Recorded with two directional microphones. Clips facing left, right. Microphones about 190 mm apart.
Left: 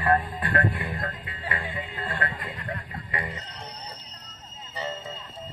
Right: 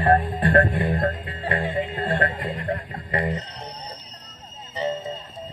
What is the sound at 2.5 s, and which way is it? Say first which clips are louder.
Music: right 7 dB; 40° right (ahead or behind).